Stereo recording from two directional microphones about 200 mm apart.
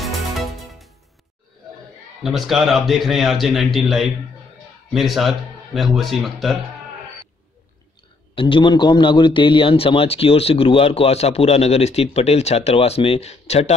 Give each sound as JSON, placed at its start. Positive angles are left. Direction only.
{"t": 0.0, "sound": "music", "side_deg": 0}
{"t": 2.2, "sound": "a man's voice", "side_deg": 0}
{"t": 8.4, "sound": "a man's voice", "side_deg": 25}